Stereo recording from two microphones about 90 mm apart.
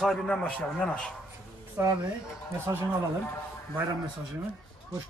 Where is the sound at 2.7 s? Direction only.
40° right (ahead or behind).